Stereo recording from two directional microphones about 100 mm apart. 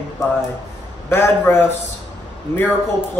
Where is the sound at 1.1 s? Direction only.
25° left (ahead or behind).